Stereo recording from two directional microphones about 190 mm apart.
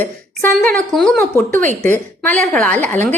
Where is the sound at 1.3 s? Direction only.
15° right (ahead or behind).